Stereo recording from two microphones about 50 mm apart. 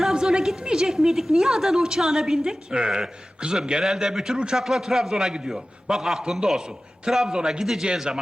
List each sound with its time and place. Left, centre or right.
0.0 s a woman's voice: centre
4.6 s a woman's voice: centre